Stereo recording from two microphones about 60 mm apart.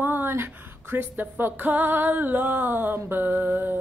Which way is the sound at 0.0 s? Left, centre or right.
Right.